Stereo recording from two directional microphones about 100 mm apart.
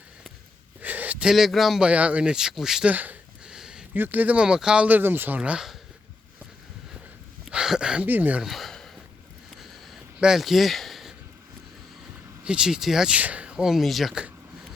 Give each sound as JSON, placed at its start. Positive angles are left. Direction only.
{"t": 0.8, "sound": "gasp", "side_deg": -15}
{"t": 1.3, "sound": "speech", "side_deg": 0}
{"t": 1.9, "sound": "speech", "side_deg": -15}
{"t": 2.9, "sound": "sniff", "side_deg": -15}
{"t": 3.9, "sound": "speech", "side_deg": -20}
{"t": 7.4, "sound": "a sound", "side_deg": -5}
{"t": 8.0, "sound": "speech", "side_deg": -20}
{"t": 8.4, "sound": "a sound", "side_deg": 0}
{"t": 12.5, "sound": "speech", "side_deg": -10}